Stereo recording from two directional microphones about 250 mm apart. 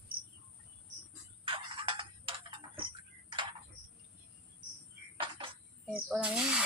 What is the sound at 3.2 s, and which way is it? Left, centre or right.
Frog, centre.